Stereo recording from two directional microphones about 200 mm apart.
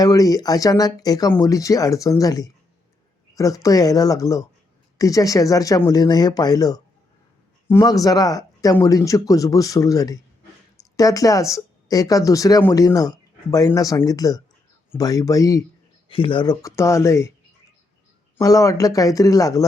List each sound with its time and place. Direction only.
0.0 s speech: 20° left (ahead or behind)
18.3 s speech: 15° left (ahead or behind)